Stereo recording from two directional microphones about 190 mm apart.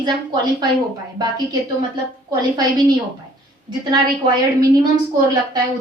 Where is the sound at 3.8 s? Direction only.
25° right (ahead or behind).